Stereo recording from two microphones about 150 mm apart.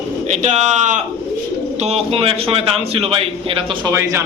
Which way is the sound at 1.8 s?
40° right (ahead or behind).